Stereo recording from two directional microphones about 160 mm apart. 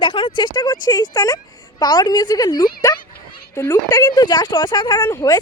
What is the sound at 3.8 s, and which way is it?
Speech, 25° left (ahead or behind).